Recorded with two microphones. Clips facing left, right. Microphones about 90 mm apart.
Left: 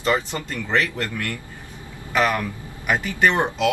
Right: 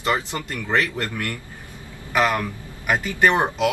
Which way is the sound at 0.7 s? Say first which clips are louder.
Even; 20° right (ahead or behind).